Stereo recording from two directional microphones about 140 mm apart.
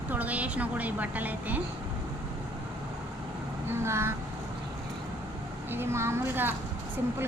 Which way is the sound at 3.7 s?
20° right (ahead or behind).